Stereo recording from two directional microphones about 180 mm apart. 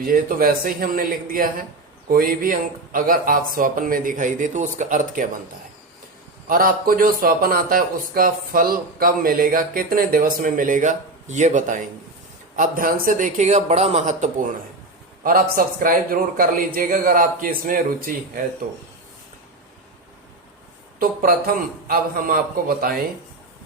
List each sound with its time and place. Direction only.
0.0 s speech: 55° right (ahead or behind)
6.5 s speech: 50° right (ahead or behind)
15.2 s speech: 55° right (ahead or behind)
21.0 s speech: 50° right (ahead or behind)